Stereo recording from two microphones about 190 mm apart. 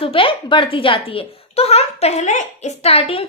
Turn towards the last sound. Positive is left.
turn(degrees=30)  # may be behind; listen again after turning